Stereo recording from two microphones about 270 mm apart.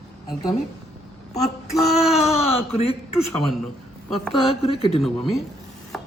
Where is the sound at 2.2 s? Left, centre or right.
Left.